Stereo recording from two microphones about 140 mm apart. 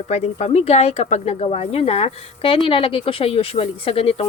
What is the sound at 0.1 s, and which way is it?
A woman's voice, 50° left (ahead or behind).